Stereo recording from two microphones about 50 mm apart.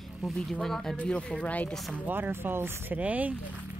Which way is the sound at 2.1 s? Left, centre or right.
Right.